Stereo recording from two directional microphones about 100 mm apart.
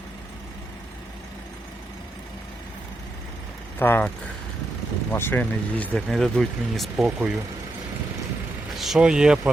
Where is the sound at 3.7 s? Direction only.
20° left (ahead or behind).